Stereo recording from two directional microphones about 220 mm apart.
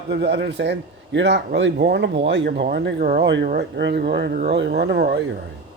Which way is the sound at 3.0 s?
40° right (ahead or behind).